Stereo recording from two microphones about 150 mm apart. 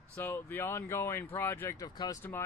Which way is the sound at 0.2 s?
15° left (ahead or behind).